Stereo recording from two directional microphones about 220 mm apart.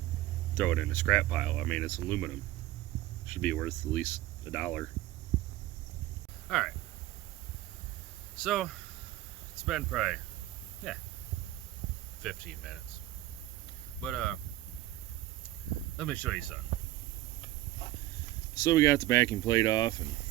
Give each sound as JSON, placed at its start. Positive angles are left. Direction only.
{"t": 0.5, "sound": "speech", "side_deg": 5}
{"t": 3.3, "sound": "speech", "side_deg": 5}
{"t": 6.5, "sound": "a sound", "side_deg": 0}
{"t": 8.4, "sound": "speech", "side_deg": 0}
{"t": 12.2, "sound": "speech", "side_deg": 0}
{"t": 14.0, "sound": "speech", "side_deg": 5}
{"t": 16.0, "sound": "speech", "side_deg": 5}
{"t": 18.5, "sound": "speech", "side_deg": 15}